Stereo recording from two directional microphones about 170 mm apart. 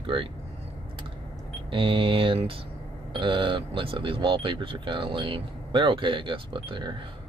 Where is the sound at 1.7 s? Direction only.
30° right (ahead or behind).